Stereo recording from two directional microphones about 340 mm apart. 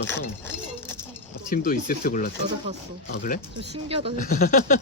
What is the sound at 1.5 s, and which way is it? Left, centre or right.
Speech, left.